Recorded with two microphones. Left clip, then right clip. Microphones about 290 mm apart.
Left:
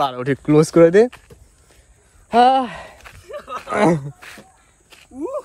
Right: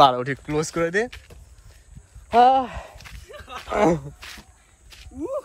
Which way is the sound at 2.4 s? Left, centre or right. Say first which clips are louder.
Left 2 dB; left.